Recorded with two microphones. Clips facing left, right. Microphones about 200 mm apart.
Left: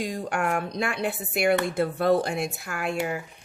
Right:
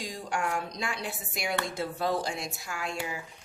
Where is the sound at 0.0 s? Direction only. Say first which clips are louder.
Left 5 dB; 60° left (ahead or behind).